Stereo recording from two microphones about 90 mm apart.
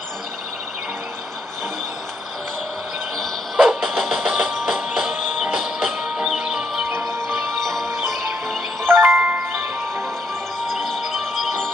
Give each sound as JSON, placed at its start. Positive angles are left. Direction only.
{"t": 3.2, "sound": "music", "side_deg": -5}
{"t": 8.8, "sound": "music", "side_deg": -25}
{"t": 10.7, "sound": "music", "side_deg": 0}